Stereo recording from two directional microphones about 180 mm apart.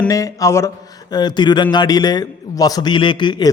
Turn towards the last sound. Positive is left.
turn(degrees=25)  # may be behind; listen again after turning